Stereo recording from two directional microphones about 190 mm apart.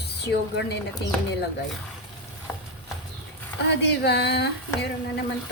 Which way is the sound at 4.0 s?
60° left (ahead or behind).